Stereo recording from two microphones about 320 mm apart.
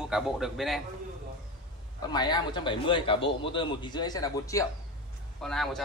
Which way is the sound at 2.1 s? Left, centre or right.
Centre.